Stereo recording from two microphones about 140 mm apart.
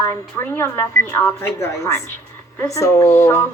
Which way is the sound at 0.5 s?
15° left (ahead or behind).